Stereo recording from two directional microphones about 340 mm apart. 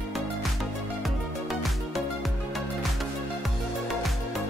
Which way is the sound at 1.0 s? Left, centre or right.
Centre.